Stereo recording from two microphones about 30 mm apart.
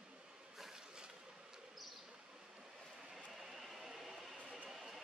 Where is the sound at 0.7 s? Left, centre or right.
Right.